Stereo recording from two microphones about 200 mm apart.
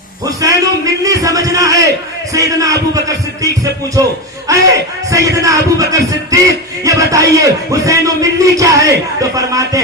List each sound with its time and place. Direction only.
0.3 s speech: 15° right (ahead or behind)
5.1 s speech: 15° right (ahead or behind)